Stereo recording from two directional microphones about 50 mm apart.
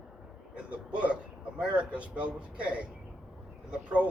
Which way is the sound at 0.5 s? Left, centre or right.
Right.